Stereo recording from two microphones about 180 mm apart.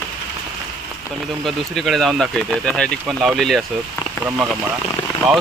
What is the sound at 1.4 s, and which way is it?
Speech, centre (ahead or behind).